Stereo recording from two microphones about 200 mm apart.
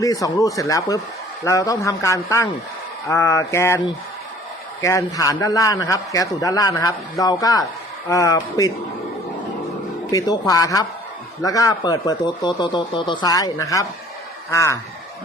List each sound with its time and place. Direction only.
0.0 s a man's voice: 15° left (ahead or behind)
4.8 s a man's voice: 15° left (ahead or behind)
10.1 s a man's voice: 20° left (ahead or behind)